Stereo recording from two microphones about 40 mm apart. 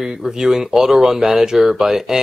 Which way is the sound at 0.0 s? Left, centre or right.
Centre.